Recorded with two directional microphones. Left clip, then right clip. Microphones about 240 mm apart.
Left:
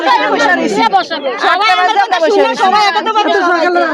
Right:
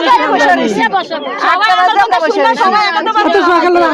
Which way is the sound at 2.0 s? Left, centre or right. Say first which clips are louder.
Even; centre.